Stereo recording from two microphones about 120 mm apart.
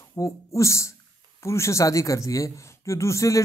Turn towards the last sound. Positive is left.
turn(degrees=25)  # may be behind; listen again after turning